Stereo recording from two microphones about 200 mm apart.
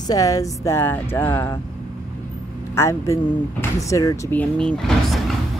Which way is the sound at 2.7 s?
15° left (ahead or behind).